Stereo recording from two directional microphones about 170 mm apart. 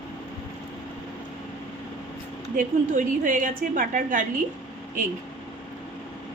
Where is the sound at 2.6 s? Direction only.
50° right (ahead or behind).